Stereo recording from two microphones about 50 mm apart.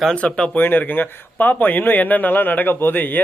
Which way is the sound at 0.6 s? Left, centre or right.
Left.